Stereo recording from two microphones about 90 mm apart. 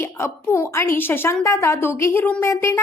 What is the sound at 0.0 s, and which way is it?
A woman's voice, 30° left (ahead or behind).